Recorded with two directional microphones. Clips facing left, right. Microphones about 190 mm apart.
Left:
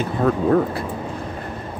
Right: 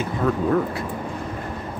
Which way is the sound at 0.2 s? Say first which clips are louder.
Left 3 dB; 40° left (ahead or behind).